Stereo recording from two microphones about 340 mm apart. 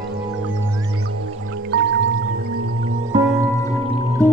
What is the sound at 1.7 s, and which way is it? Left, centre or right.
Music, right.